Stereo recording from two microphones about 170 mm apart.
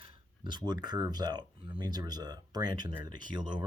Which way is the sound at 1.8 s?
25° right (ahead or behind).